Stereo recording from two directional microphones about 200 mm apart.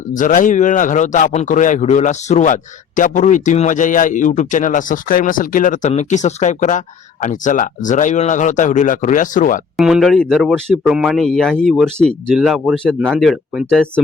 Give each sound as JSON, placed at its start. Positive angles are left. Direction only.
{"t": 0.1, "sound": "a man's voice", "side_deg": 40}
{"t": 9.7, "sound": "speech", "side_deg": 0}